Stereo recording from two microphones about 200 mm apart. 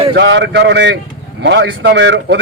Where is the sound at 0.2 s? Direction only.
60° right (ahead or behind).